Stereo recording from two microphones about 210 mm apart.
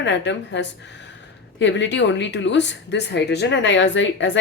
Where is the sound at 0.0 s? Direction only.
55° left (ahead or behind).